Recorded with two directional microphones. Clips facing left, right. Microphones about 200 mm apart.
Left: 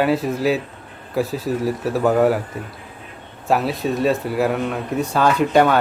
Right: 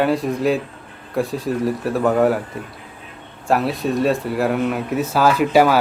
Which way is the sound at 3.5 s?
Centre (ahead or behind).